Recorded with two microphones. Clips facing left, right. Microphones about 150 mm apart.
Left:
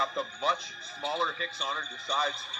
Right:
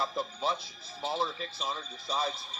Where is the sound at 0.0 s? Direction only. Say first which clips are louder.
Left 1 dB; 30° right (ahead or behind).